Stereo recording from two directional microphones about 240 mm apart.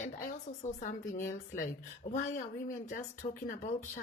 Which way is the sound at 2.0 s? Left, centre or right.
Left.